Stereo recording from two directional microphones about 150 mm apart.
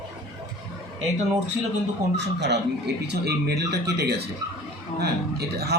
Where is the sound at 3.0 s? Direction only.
90° right.